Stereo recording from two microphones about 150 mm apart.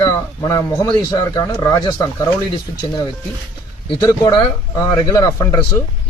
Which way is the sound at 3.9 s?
25° left (ahead or behind).